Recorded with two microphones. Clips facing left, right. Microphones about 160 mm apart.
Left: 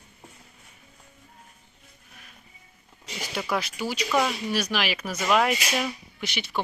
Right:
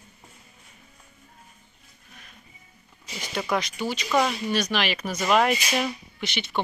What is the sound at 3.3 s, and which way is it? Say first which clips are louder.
Speech: right 2 dB; 5° left (ahead or behind).